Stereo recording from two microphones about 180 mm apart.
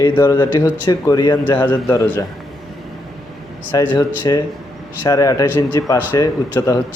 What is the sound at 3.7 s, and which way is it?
A man's voice, 25° left (ahead or behind).